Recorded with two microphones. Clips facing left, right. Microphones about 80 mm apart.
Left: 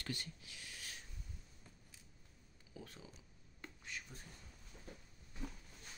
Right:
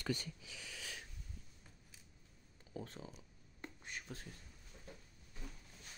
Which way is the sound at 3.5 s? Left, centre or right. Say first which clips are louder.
Right 1 dB; right.